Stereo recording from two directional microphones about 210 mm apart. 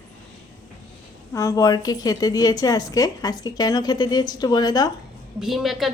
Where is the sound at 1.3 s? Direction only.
15° left (ahead or behind).